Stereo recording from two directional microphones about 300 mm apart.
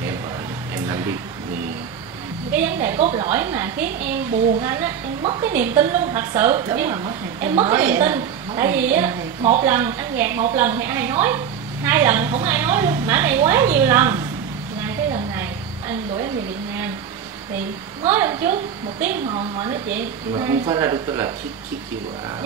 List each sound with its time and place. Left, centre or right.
2.5 s a woman's voice: centre
3.0 s a woman's voice: centre
3.3 s a woman's voice: centre
7.7 s a woman's voice: centre
18.0 s a woman's voice: centre